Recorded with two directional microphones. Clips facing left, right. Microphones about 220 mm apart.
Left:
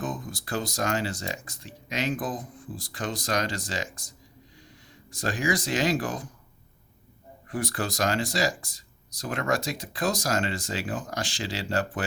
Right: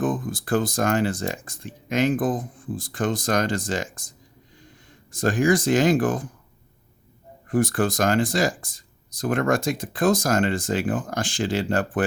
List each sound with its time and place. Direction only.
0.0 s speech: 50° right (ahead or behind)
7.4 s speech: 50° right (ahead or behind)